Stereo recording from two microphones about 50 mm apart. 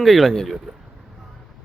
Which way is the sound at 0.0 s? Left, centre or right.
Centre.